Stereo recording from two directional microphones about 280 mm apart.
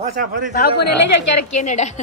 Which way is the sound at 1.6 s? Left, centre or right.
Left.